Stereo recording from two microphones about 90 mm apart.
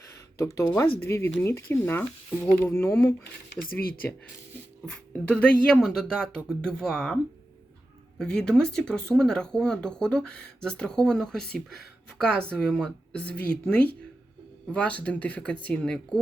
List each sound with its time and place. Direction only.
0.3 s speech: 35° left (ahead or behind)
5.1 s speech: 10° left (ahead or behind)
8.2 s speech: 10° left (ahead or behind)